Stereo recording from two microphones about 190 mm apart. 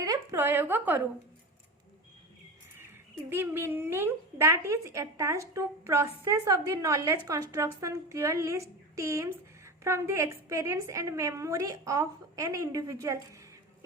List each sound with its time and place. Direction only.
0.0 s a woman's voice: 20° right (ahead or behind)
3.2 s speech: 10° right (ahead or behind)